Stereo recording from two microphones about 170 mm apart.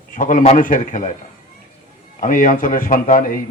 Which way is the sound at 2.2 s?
50° left (ahead or behind).